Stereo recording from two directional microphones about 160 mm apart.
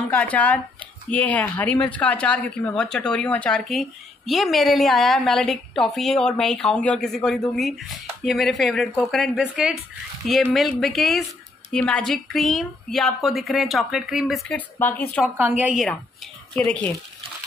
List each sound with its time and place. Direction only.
0.1 s a woman's voice: 10° left (ahead or behind)
14.8 s speech: 10° left (ahead or behind)
15.2 s a woman's voice: 10° right (ahead or behind)
16.5 s speech: 10° left (ahead or behind)